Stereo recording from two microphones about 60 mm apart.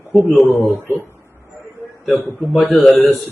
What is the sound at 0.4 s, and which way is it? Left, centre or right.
Speech, left.